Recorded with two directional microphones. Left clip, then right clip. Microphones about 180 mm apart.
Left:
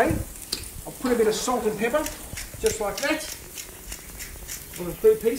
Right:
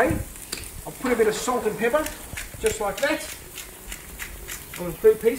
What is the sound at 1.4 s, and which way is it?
Speech, 10° right (ahead or behind).